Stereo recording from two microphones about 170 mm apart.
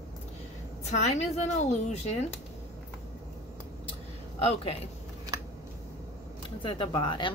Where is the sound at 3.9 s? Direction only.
35° left (ahead or behind).